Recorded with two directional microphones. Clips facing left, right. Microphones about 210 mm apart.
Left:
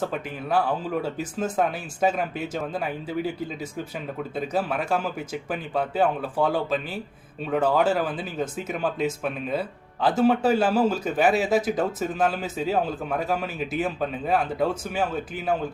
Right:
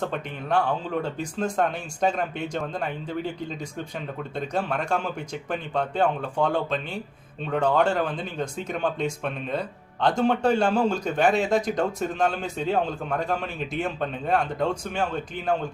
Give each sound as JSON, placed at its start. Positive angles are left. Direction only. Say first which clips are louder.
{"t": 0.0, "sound": "speech", "louder": "left 1 dB", "side_deg": 5}